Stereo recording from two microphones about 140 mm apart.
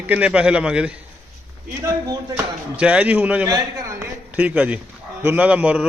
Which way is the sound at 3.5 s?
25° right (ahead or behind).